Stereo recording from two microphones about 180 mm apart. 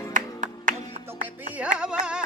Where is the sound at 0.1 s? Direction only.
45° right (ahead or behind).